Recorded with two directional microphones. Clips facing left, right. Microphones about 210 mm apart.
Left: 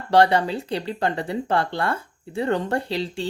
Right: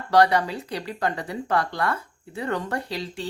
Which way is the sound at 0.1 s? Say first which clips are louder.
Left 2 dB; 25° left (ahead or behind).